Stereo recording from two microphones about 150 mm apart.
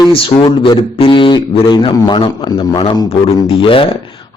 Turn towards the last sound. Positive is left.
turn(degrees=35)  # may be behind; listen again after turning